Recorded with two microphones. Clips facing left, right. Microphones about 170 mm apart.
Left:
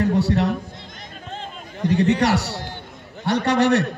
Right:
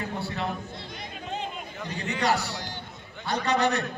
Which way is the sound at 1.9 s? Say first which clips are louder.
Left 9 dB; 75° left (ahead or behind).